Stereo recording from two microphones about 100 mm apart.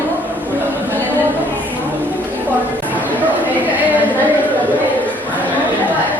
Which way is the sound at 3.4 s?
15° right (ahead or behind).